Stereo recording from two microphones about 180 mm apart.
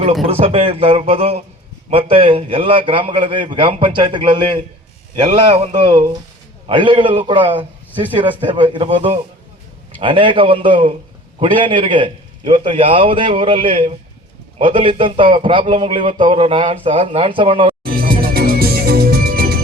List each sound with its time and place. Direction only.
0.3 s a man's voice: 35° right (ahead or behind)
17.8 s music: 55° right (ahead or behind)